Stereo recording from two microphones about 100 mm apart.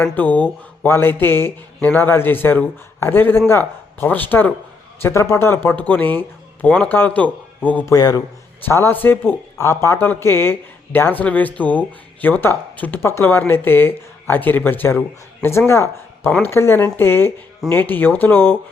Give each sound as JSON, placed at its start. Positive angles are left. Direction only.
{"t": 0.1, "sound": "speech", "side_deg": 15}
{"t": 5.0, "sound": "speech", "side_deg": 30}
{"t": 7.9, "sound": "a man's voice", "side_deg": 40}
{"t": 8.6, "sound": "speech", "side_deg": 25}